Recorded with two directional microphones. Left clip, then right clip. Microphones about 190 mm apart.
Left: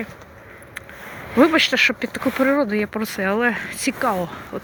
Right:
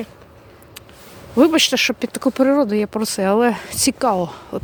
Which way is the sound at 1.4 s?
60° right (ahead or behind).